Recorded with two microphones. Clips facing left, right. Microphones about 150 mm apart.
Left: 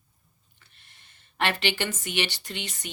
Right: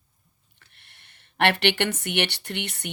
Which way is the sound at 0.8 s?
65° right (ahead or behind).